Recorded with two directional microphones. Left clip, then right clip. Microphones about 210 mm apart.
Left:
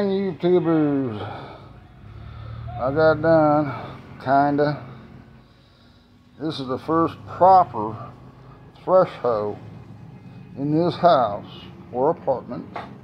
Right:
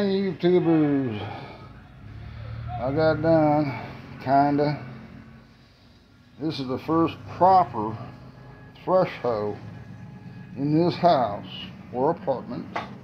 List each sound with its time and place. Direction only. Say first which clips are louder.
0.0 s speech: left 1 dB; centre (ahead or behind)
2.8 s speech: left 5 dB; centre (ahead or behind)
6.4 s speech: left 2 dB; 5° right (ahead or behind)
10.6 s speech: left 3 dB; 5° right (ahead or behind)